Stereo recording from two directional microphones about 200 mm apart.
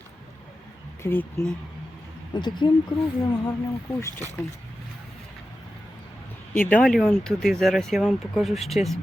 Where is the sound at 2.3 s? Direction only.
20° left (ahead or behind).